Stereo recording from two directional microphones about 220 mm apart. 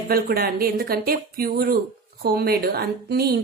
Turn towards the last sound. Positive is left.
turn(degrees=-45)  # may be behind; listen again after turning